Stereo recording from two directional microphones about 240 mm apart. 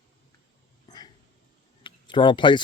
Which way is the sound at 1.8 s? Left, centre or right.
Centre.